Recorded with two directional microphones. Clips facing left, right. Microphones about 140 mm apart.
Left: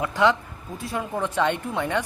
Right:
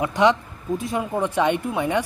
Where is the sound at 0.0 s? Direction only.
20° right (ahead or behind).